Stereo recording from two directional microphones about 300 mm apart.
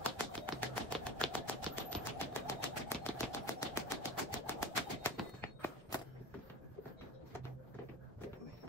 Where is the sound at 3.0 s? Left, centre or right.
Centre.